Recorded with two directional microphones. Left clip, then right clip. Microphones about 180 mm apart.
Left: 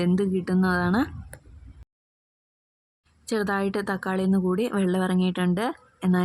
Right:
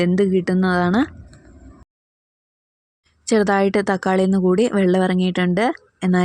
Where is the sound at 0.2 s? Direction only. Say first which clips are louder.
Right 8 dB; 20° right (ahead or behind).